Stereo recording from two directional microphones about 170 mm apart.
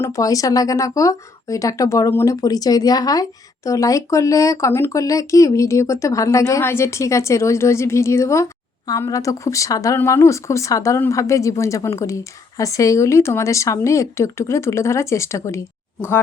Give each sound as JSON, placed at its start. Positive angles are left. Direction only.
{"t": 0.0, "sound": "speech", "side_deg": 20}